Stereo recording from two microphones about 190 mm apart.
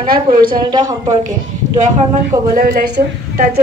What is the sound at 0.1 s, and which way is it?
Speech, 50° right (ahead or behind).